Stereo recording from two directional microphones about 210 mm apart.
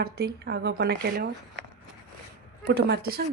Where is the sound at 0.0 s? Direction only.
45° right (ahead or behind).